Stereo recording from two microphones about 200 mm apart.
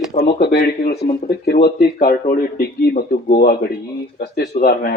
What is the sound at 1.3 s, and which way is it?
Speech, 50° left (ahead or behind).